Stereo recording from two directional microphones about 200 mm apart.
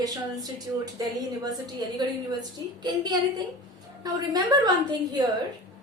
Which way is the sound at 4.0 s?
20° right (ahead or behind).